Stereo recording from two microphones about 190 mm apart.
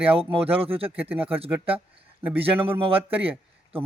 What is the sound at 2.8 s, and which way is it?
Speech, 30° right (ahead or behind).